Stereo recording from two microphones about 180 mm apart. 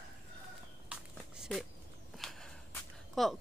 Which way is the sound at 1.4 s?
Centre (ahead or behind).